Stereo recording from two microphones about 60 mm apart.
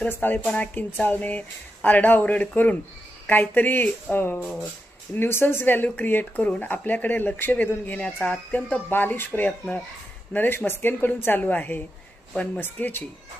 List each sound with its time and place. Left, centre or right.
0.1 s a woman's voice: left